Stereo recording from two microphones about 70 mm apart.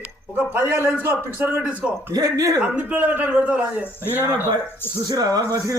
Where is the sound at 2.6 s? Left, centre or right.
Right.